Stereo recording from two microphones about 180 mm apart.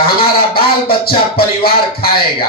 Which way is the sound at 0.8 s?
60° left (ahead or behind).